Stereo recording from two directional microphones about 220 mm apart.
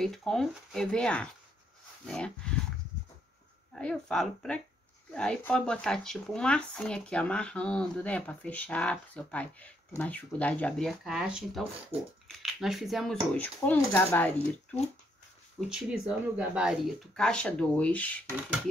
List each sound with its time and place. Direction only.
0.0 s speech: centre (ahead or behind)
3.7 s speech: 5° left (ahead or behind)
11.9 s speech: 25° right (ahead or behind)
12.4 s speech: centre (ahead or behind)